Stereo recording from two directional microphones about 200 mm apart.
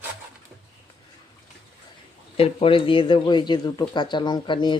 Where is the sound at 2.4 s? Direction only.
30° left (ahead or behind).